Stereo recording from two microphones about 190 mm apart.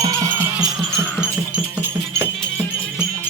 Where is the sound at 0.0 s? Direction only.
15° right (ahead or behind).